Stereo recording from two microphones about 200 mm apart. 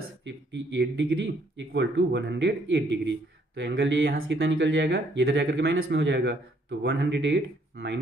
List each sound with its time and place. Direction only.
0.2 s speech: 60° right (ahead or behind)